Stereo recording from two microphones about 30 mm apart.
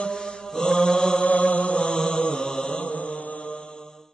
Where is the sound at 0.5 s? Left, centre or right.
Left.